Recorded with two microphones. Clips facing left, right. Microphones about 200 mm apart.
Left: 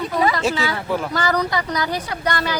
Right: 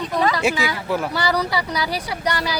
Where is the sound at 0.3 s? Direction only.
10° right (ahead or behind).